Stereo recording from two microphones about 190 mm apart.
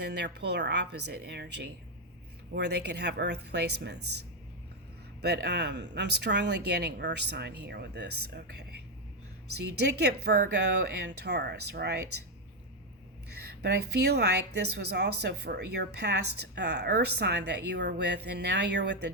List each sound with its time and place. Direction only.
0.0 s a woman's voice: 60° right (ahead or behind)
5.2 s a woman's voice: 60° right (ahead or behind)
13.6 s a woman's voice: 60° right (ahead or behind)